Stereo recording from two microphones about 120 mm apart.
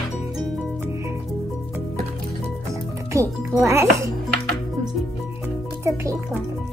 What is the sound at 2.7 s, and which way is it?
Music, 25° right (ahead or behind).